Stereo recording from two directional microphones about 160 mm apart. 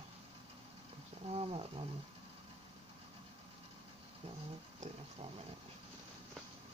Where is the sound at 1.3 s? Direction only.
35° right (ahead or behind).